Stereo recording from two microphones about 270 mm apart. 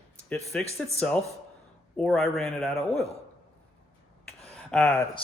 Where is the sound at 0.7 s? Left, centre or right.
Centre.